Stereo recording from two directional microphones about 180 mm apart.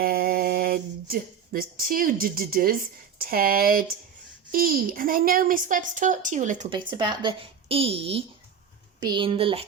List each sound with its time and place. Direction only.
0.0 s a woman's voice: 55° right (ahead or behind)
6.7 s speech: 25° right (ahead or behind)